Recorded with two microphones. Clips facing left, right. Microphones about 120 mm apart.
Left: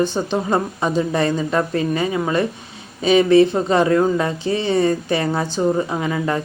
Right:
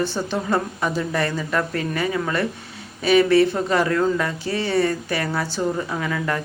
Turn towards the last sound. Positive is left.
turn(degrees=25)  # may be behind; listen again after turning